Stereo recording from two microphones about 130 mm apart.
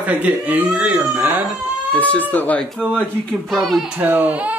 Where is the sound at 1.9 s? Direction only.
10° left (ahead or behind).